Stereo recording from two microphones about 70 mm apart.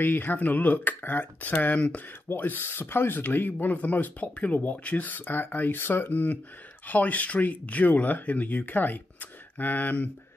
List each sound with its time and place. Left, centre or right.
0.0 s speech: left